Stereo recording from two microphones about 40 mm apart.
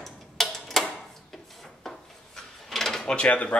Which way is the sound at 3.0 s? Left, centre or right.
Left.